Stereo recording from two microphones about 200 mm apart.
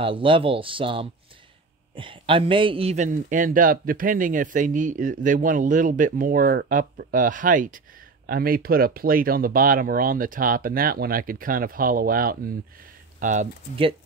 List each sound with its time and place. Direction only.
0.0 s a man's voice: 25° right (ahead or behind)